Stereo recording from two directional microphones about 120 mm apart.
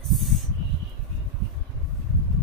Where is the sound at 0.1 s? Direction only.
Centre (ahead or behind).